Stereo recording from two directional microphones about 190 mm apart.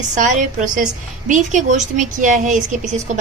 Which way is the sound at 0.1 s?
40° right (ahead or behind).